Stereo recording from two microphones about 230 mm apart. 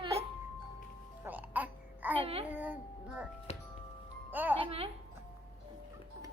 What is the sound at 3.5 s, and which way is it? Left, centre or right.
Music, left.